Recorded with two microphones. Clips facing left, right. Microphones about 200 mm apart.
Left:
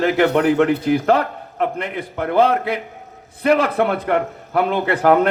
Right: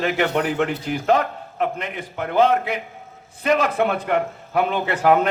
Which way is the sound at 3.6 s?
55° left (ahead or behind).